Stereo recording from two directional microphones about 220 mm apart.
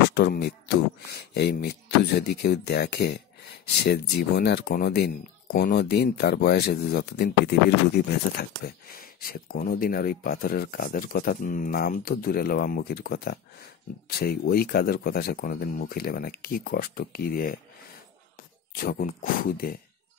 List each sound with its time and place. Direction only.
0.1 s speech: 45° left (ahead or behind)
18.7 s speech: 40° left (ahead or behind)